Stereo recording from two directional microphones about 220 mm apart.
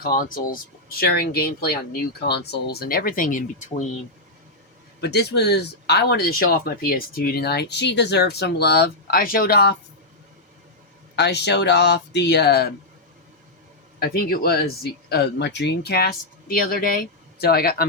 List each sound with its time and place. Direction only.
0.0 s speech: 40° left (ahead or behind)
4.9 s speech: 50° left (ahead or behind)
11.2 s speech: 50° left (ahead or behind)
14.0 s speech: 45° left (ahead or behind)